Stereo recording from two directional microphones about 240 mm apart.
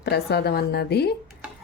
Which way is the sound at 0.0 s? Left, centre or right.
Left.